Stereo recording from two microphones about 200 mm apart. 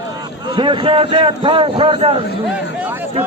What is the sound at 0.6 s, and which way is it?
A man's voice, 25° right (ahead or behind).